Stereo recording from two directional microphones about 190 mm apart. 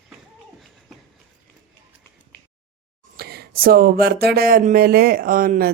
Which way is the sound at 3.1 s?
55° right (ahead or behind).